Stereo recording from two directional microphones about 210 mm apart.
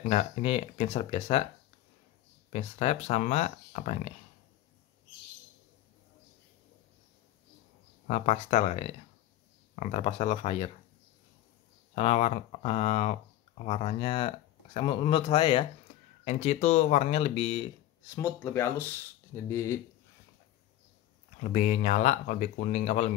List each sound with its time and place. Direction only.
0.0 s speech: 30° left (ahead or behind)
2.5 s speech: 30° left (ahead or behind)
8.1 s speech: 30° left (ahead or behind)
11.9 s speech: 30° left (ahead or behind)
18.1 s speech: 15° left (ahead or behind)
21.4 s speech: 35° left (ahead or behind)